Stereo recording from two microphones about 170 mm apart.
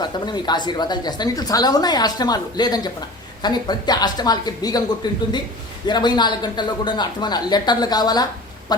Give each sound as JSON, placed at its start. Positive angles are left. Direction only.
{"t": 0.0, "sound": "a woman's voice", "side_deg": 25}